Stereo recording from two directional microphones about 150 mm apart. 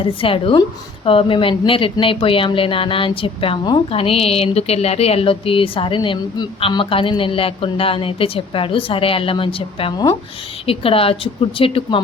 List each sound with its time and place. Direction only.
0.0 s a woman's voice: 35° left (ahead or behind)